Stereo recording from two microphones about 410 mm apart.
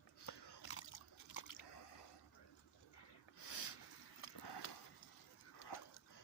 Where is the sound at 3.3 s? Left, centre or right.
Left.